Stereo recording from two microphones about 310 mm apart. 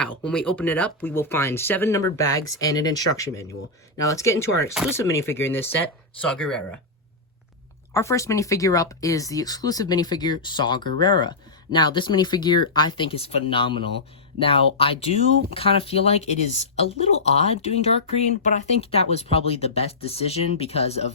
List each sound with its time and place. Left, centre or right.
0.0 s speech: centre
7.9 s speech: centre